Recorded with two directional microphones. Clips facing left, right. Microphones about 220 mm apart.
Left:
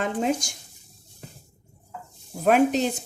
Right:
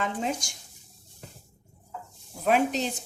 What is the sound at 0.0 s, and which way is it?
Speech, 50° left (ahead or behind).